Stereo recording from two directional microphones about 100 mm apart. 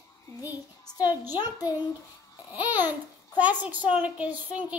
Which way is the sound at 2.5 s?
15° right (ahead or behind).